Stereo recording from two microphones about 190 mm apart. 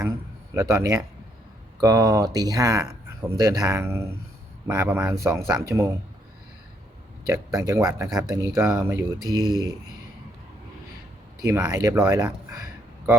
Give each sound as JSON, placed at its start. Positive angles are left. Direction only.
{"t": 0.5, "sound": "speech", "side_deg": -15}
{"t": 7.3, "sound": "speech", "side_deg": -15}
{"t": 8.6, "sound": "speech", "side_deg": -5}
{"t": 9.2, "sound": "speech", "side_deg": -20}
{"t": 11.4, "sound": "speech", "side_deg": -15}